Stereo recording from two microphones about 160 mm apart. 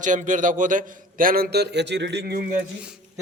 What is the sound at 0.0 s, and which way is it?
A man's voice, 50° right (ahead or behind).